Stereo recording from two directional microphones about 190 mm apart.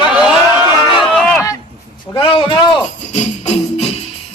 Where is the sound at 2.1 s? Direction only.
25° left (ahead or behind).